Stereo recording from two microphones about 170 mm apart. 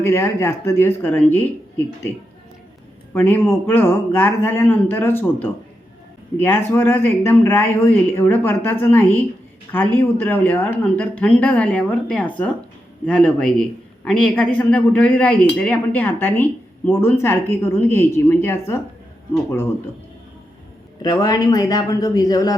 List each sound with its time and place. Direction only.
0.0 s speech: 15° left (ahead or behind)
3.1 s speech: 10° left (ahead or behind)
21.0 s speech: 20° left (ahead or behind)